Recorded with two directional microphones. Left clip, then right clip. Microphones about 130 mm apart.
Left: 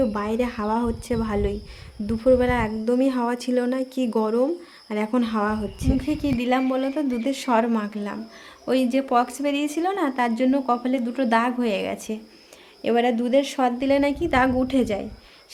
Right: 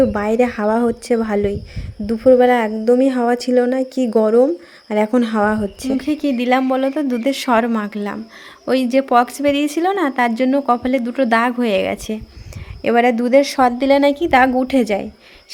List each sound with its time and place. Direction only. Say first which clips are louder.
0.0 s a woman's voice: right 8 dB; 40° right (ahead or behind)